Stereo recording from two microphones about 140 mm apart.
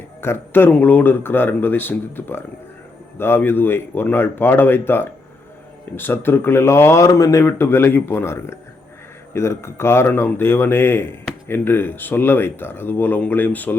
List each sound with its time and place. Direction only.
0.2 s speech: 15° left (ahead or behind)